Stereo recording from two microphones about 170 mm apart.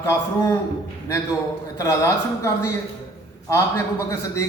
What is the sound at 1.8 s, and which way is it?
A man's voice, 20° left (ahead or behind).